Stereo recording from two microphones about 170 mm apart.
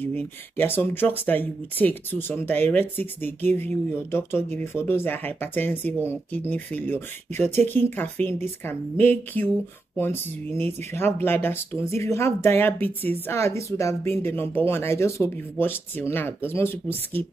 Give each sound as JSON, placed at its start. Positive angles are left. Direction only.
{"t": 0.0, "sound": "speech", "side_deg": 10}